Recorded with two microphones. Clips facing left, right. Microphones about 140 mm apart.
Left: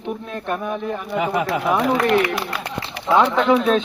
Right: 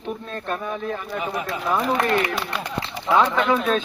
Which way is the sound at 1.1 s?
85° left.